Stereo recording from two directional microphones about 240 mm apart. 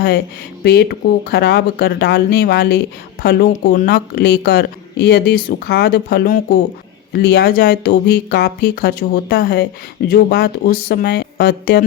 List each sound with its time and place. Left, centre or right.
0.6 s speech: left